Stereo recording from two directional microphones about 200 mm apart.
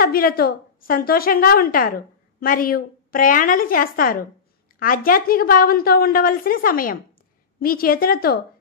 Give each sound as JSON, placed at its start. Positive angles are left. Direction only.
{"t": 0.0, "sound": "a woman's voice", "side_deg": 45}